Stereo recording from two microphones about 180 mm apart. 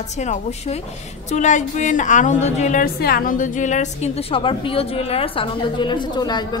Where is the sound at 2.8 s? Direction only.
55° left (ahead or behind); by 6.4 s 25° left (ahead or behind).